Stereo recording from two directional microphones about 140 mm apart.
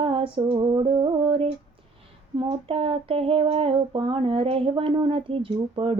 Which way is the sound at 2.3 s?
40° right (ahead or behind).